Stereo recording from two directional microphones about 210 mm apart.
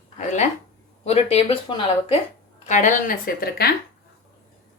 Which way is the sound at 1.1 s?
30° left (ahead or behind).